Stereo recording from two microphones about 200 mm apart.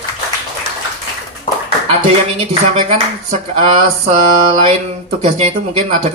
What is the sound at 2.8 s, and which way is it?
Speech, 30° right (ahead or behind).